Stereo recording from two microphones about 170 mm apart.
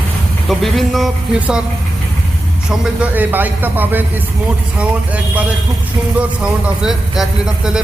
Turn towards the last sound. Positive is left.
turn(degrees=-5)  # may be behind; listen again after turning